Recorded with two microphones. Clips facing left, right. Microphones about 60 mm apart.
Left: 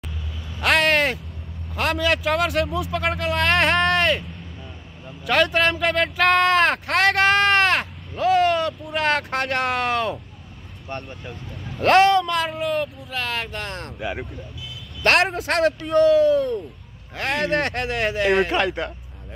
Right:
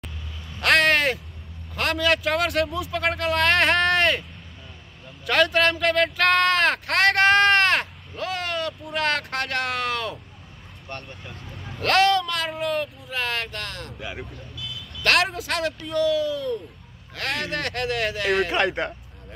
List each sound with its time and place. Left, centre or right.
0.6 s a sound: centre
1.8 s speech: centre
5.2 s speech: centre
10.9 s vehicle: centre
11.8 s speech: left; by 13.5 s centre
13.5 s speech: centre
15.3 s speech: left
17.5 s speech: left
17.8 s speech: centre
18.7 s a man's voice: right